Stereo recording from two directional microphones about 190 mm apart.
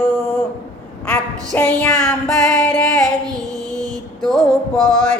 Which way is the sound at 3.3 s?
20° right (ahead or behind).